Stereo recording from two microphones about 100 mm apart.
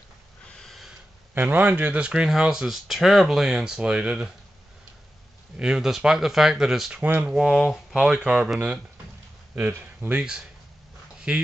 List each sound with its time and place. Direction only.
0.5 s a sound: 5° left (ahead or behind)
1.3 s speech: 20° right (ahead or behind)
5.6 s speech: 5° right (ahead or behind)
7.0 s speech: 15° right (ahead or behind)
7.3 s speech: 5° right (ahead or behind)
9.6 s speech: 15° right (ahead or behind)
11.3 s speech: 10° right (ahead or behind)